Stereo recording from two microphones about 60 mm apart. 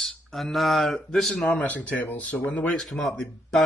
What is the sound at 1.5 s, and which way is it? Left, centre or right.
Speech, left.